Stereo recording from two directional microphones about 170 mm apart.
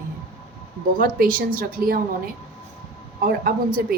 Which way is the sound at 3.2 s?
55° right (ahead or behind).